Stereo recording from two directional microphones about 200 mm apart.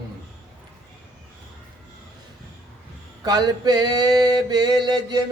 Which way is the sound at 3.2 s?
20° right (ahead or behind).